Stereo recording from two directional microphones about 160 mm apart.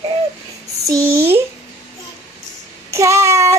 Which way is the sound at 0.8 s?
20° right (ahead or behind).